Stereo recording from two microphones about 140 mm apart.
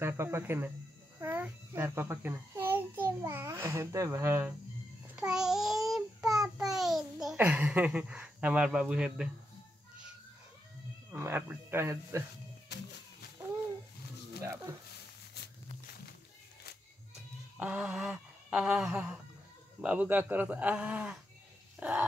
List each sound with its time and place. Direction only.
0.0 s a child's voice: 15° right (ahead or behind)
5.0 s babbling: 10° right (ahead or behind)
6.2 s child singing: centre (ahead or behind)
7.3 s speech: 10° right (ahead or behind)
11.1 s speech: 15° right (ahead or behind)
14.4 s speech: 20° right (ahead or behind)
17.6 s a sound: 10° right (ahead or behind)
19.8 s speech: 10° right (ahead or behind)
21.7 s a sound: 10° right (ahead or behind)